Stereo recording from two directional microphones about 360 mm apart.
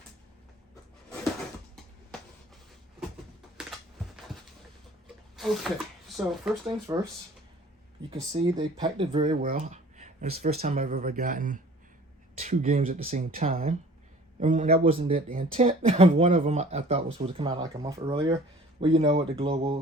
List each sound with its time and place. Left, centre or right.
5.4 s speech: centre
8.1 s speech: centre